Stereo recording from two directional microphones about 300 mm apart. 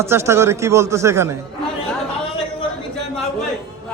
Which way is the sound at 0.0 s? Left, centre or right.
Centre.